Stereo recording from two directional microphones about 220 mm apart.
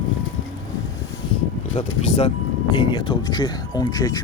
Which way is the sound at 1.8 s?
25° left (ahead or behind).